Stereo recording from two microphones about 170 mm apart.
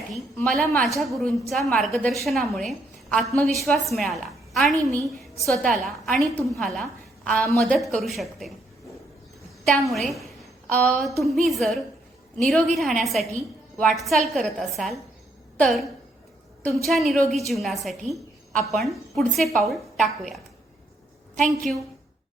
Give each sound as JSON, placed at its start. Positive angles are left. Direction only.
{"t": 0.3, "sound": "a woman's voice", "side_deg": 5}
{"t": 4.7, "sound": "a woman's voice", "side_deg": -20}
{"t": 5.4, "sound": "a woman's voice", "side_deg": 0}
{"t": 9.9, "sound": "a woman's voice", "side_deg": 0}